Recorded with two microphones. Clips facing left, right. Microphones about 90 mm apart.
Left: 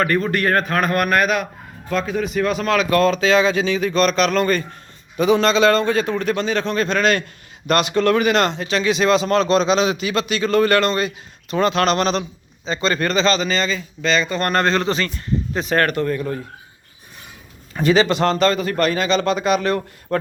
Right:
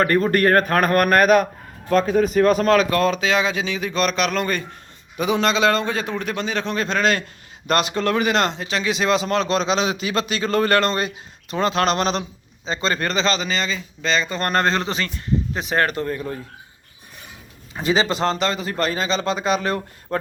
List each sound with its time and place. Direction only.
0.0 s a man's voice: 40° right (ahead or behind)
2.9 s a man's voice: 15° right (ahead or behind); by 11.1 s 35° right (ahead or behind)
11.6 s a man's voice: 25° right (ahead or behind)
14.0 s a man's voice: 25° right (ahead or behind)
17.7 s a man's voice: 20° right (ahead or behind)